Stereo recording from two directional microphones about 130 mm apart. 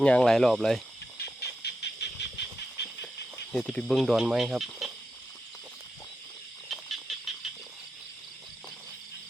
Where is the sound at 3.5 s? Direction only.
5° left (ahead or behind).